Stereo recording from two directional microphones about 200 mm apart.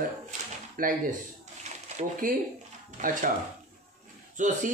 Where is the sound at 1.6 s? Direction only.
40° right (ahead or behind).